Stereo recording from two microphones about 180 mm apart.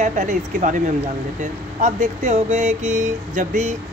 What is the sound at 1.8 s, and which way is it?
Speech, 40° right (ahead or behind).